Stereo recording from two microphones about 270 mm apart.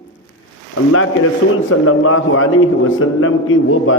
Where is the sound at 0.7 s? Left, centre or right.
Left.